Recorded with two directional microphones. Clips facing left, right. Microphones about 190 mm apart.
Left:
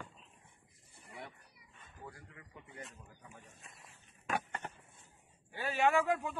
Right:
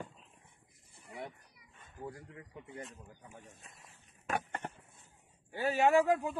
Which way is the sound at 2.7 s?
35° right (ahead or behind).